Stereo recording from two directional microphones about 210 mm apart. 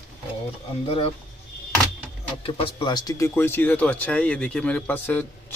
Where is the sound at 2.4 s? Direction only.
25° left (ahead or behind).